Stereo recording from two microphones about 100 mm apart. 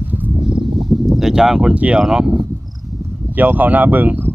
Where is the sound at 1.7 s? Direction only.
15° right (ahead or behind).